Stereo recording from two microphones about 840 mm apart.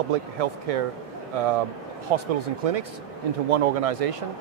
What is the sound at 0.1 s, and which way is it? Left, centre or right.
Speech, right.